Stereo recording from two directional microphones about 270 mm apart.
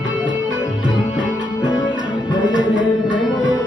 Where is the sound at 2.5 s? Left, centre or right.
Centre.